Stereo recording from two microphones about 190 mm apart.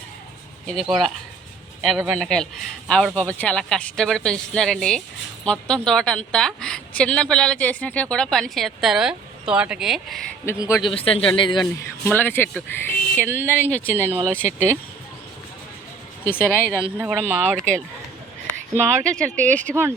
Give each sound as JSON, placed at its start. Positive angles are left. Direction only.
{"t": 0.7, "sound": "a woman's voice", "side_deg": 0}
{"t": 10.8, "sound": "a man's voice", "side_deg": 30}
{"t": 11.6, "sound": "speech", "side_deg": 10}
{"t": 17.0, "sound": "speech", "side_deg": -10}
{"t": 18.7, "sound": "speech", "side_deg": -15}
{"t": 19.0, "sound": "speech", "side_deg": 5}